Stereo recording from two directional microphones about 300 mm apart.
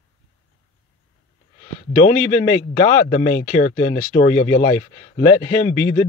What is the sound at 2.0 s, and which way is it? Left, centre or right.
Speech, left.